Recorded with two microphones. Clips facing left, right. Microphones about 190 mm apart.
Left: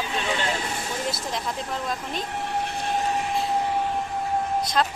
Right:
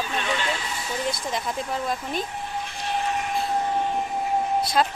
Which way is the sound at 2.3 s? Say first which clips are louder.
Left 4 dB; 70° left (ahead or behind).